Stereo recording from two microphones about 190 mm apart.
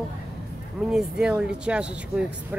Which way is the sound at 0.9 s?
5° right (ahead or behind).